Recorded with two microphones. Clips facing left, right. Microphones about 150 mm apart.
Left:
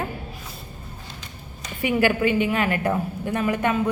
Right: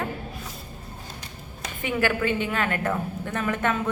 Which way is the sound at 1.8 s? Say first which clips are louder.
Left 4 dB; 15° left (ahead or behind).